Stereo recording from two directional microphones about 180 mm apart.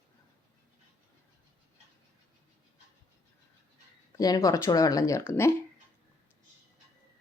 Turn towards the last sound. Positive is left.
turn(degrees=15)  # may be behind; listen again after turning